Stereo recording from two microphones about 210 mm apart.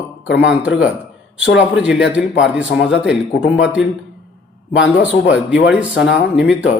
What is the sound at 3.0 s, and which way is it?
Speech, 5° right (ahead or behind).